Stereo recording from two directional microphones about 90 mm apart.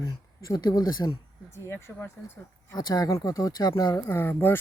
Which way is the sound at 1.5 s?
30° left (ahead or behind).